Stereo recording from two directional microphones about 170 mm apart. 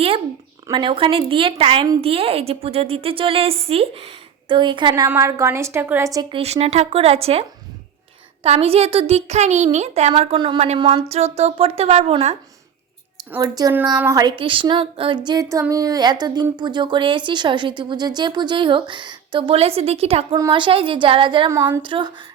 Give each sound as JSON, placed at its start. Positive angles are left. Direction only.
{"t": 0.7, "sound": "a woman's voice", "side_deg": -30}
{"t": 5.0, "sound": "a woman's voice", "side_deg": -15}
{"t": 6.3, "sound": "a woman's voice", "side_deg": -35}
{"t": 8.4, "sound": "a woman's voice", "side_deg": -35}
{"t": 13.4, "sound": "speech", "side_deg": -20}
{"t": 20.3, "sound": "speech", "side_deg": -25}
{"t": 21.5, "sound": "a woman's voice", "side_deg": -15}
{"t": 21.8, "sound": "speech", "side_deg": -30}